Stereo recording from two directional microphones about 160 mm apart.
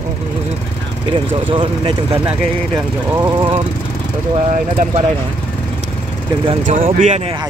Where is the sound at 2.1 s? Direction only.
15° right (ahead or behind).